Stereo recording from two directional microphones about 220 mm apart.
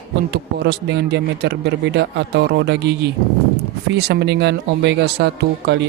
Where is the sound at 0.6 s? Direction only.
50° right (ahead or behind).